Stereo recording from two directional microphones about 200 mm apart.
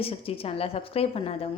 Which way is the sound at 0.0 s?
30° left (ahead or behind).